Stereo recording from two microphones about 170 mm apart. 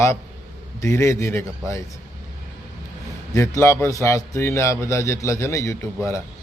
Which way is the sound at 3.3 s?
15° left (ahead or behind).